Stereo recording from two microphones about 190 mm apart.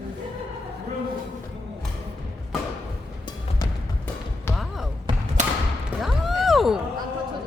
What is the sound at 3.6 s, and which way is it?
Music, 20° left (ahead or behind).